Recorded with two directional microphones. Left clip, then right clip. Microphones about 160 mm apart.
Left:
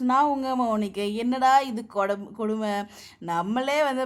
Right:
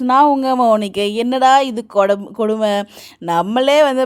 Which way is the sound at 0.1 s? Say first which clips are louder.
Right 11 dB; 50° right (ahead or behind).